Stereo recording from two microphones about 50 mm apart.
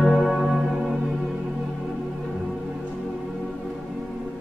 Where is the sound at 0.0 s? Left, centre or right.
Centre.